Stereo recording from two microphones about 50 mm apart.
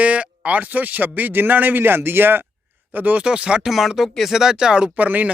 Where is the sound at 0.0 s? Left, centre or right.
Right.